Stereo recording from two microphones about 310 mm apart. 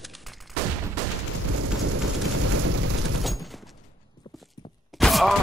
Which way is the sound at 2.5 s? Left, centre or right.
Right.